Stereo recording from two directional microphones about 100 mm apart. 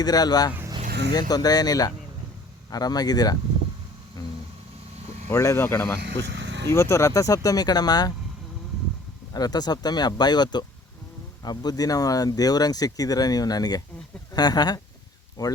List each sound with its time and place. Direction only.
0.0 s speech: 40° left (ahead or behind)
4.2 s vehicle: 35° left (ahead or behind)
5.3 s speech: 35° left (ahead or behind)
9.3 s speech: 40° left (ahead or behind)